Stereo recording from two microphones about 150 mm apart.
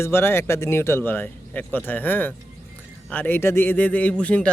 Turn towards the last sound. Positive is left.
turn(degrees=10)  # may be behind; listen again after turning